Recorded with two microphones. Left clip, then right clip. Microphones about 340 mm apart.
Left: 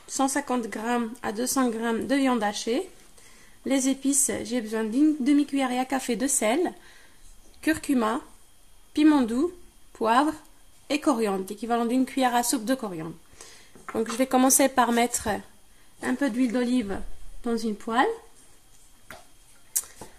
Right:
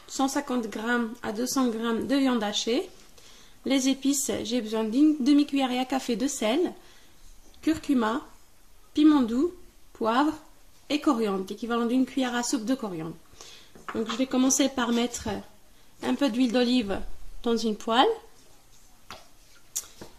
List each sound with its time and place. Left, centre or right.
0.1 s speech: centre
14.2 s a woman's voice: left
14.5 s speech: centre
16.0 s speech: centre